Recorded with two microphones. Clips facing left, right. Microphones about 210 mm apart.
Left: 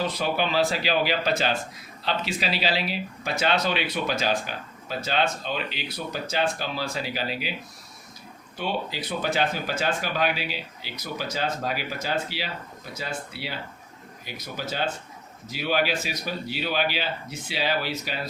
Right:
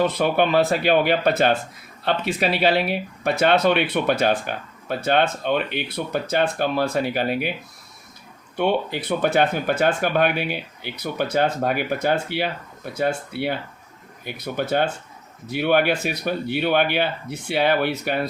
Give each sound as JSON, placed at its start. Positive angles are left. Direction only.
{"t": 0.0, "sound": "speech", "side_deg": -55}
{"t": 8.5, "sound": "speech", "side_deg": -60}